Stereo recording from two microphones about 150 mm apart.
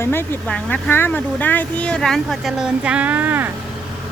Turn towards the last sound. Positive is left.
turn(degrees=-15)  # may be behind; listen again after turning